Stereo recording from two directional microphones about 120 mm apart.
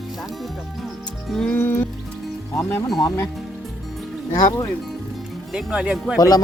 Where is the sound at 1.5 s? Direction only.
20° left (ahead or behind).